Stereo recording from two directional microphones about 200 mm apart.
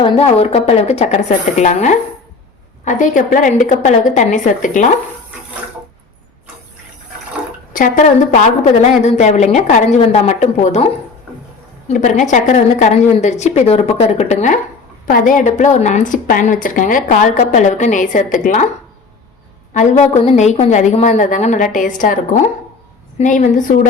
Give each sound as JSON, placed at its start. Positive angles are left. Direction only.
{"t": 0.0, "sound": "a woman's voice", "side_deg": 30}
{"t": 7.7, "sound": "a woman's voice", "side_deg": 40}
{"t": 11.9, "sound": "a woman's voice", "side_deg": 35}
{"t": 19.7, "sound": "a woman's voice", "side_deg": 40}